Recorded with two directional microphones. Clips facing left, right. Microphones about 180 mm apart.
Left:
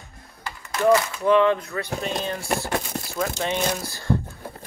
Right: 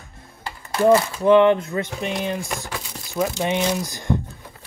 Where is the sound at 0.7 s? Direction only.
35° right (ahead or behind); by 2.4 s 15° right (ahead or behind).